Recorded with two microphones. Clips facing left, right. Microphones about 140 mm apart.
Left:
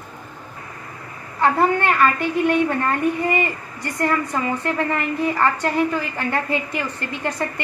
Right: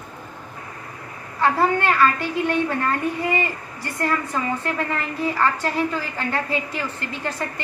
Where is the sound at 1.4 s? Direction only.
15° left (ahead or behind).